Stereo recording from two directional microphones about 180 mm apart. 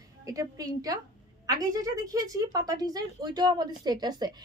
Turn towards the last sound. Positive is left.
turn(degrees=-25)  # may be behind; listen again after turning